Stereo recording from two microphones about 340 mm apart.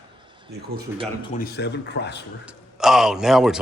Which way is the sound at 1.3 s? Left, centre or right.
Left.